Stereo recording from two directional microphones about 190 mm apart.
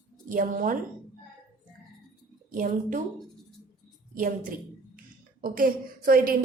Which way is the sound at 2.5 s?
45° right (ahead or behind).